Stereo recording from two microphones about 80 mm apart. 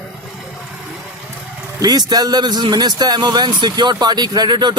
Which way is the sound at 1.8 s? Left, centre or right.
Right.